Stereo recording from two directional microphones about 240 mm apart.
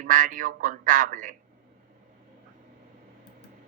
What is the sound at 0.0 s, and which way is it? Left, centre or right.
Speech, right.